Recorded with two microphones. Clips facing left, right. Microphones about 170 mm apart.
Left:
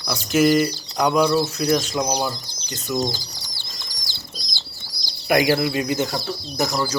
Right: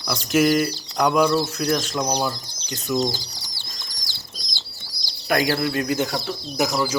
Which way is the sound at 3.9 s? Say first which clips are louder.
Left 2 dB; 90° left.